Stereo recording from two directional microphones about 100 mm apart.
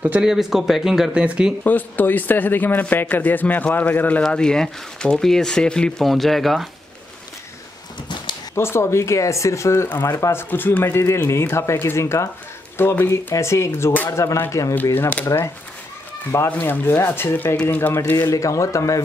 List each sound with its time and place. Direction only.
0.2 s speech: 5° right (ahead or behind)
1.6 s a man's voice: 15° left (ahead or behind); by 6.7 s centre (ahead or behind)
8.5 s a man's voice: 25° left (ahead or behind)
15.2 s speech: 30° left (ahead or behind)
16.4 s speech: 15° left (ahead or behind)
18.3 s speech: 35° left (ahead or behind)